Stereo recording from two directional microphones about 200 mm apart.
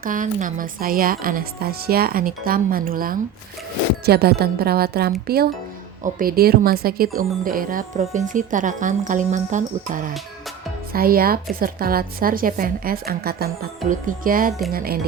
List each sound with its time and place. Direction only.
0.0 s a woman's voice: 40° right (ahead or behind)